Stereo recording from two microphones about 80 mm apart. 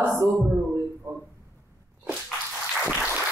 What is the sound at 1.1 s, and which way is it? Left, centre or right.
Speech, right.